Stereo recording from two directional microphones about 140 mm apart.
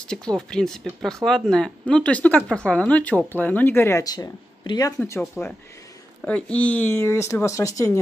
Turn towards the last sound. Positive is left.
turn(degrees=25)  # may be behind; listen again after turning